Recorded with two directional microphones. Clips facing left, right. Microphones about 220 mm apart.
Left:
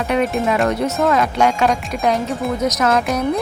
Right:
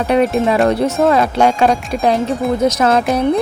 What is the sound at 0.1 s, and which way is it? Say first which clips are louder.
Speech: right 5 dB; 35° right (ahead or behind).